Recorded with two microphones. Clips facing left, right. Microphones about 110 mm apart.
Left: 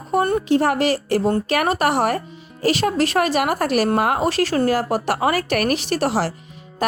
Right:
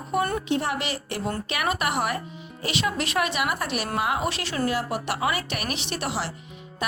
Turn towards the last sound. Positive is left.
turn(degrees=40)  # may be behind; listen again after turning